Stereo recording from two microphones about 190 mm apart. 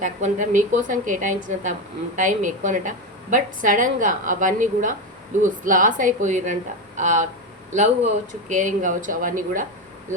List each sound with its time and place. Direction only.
0.0 s a woman's voice: 40° right (ahead or behind)